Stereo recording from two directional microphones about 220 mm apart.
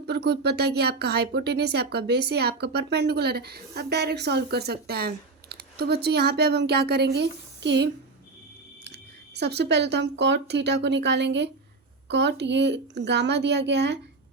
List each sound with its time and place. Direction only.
0.1 s speech: 50° right (ahead or behind)
9.4 s speech: 50° right (ahead or behind)